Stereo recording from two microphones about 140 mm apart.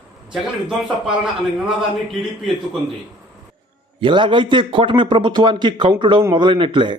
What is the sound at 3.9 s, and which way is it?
A man's voice, 35° right (ahead or behind).